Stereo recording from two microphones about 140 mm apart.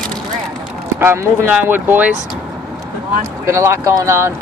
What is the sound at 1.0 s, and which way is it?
Speech, 15° right (ahead or behind).